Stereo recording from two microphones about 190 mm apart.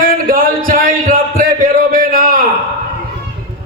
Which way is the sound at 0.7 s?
45° right (ahead or behind).